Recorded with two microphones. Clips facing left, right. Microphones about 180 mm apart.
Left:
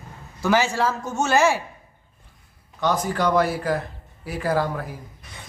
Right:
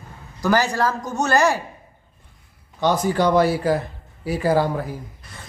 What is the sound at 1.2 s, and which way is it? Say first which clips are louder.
Speech: right 1 dB; 5° left (ahead or behind).